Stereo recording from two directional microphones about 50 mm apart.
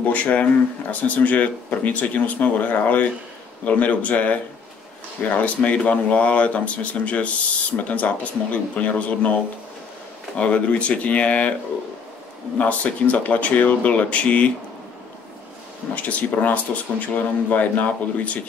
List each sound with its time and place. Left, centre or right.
0.0 s speech: left
12.5 s speech: left
15.9 s speech: left